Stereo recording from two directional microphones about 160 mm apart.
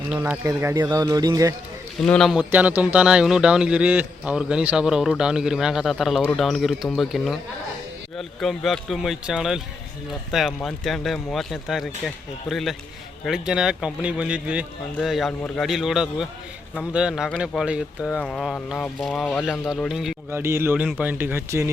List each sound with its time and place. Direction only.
0.1 s speech: 5° right (ahead or behind)
0.4 s speech: 20° right (ahead or behind)
2.0 s a man's voice: 5° left (ahead or behind)
8.4 s a man's voice: centre (ahead or behind)
20.3 s speech: 15° right (ahead or behind)